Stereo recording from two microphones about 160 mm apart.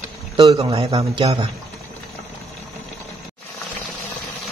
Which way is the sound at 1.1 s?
35° right (ahead or behind).